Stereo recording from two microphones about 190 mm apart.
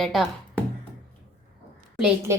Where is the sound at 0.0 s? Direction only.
Centre (ahead or behind).